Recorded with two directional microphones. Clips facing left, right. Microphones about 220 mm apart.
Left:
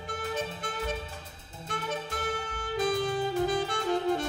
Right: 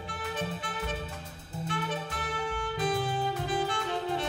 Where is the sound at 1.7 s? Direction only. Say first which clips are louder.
Left 1 dB; 45° left (ahead or behind).